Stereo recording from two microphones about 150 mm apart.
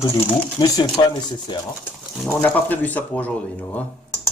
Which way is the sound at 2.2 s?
Centre (ahead or behind).